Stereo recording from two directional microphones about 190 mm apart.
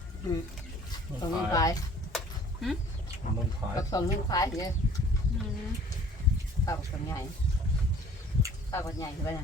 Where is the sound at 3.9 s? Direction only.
20° left (ahead or behind).